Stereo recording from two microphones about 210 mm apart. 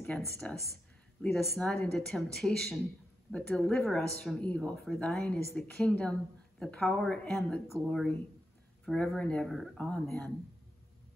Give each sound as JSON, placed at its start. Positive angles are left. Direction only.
{"t": 0.4, "sound": "speech", "side_deg": 5}